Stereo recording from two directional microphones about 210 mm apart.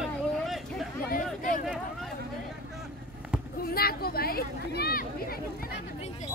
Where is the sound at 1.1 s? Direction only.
40° left (ahead or behind).